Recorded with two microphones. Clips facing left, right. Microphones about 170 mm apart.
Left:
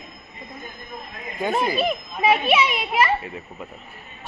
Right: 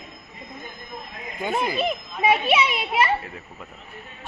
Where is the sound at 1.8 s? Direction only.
20° right (ahead or behind).